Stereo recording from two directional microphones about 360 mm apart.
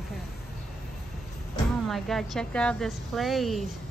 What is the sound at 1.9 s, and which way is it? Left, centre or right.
A woman's voice, centre.